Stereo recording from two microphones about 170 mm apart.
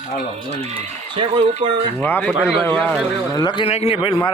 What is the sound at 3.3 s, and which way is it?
Speech, 25° left (ahead or behind).